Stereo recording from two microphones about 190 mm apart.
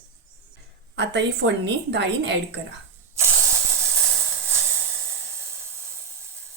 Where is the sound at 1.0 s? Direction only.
65° right (ahead or behind).